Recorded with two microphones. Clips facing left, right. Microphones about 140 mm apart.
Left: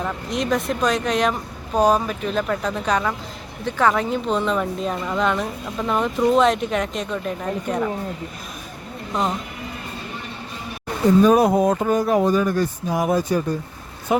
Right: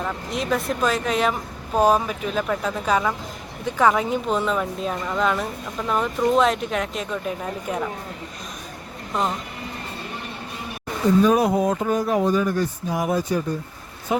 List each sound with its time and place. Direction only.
0.0 s a woman's voice: centre (ahead or behind)
9.1 s a woman's voice: centre (ahead or behind)
11.3 s speech: 40° left (ahead or behind)
14.1 s speech: 60° left (ahead or behind)